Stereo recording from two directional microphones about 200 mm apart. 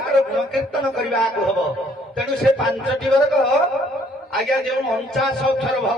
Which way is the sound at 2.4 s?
Centre (ahead or behind).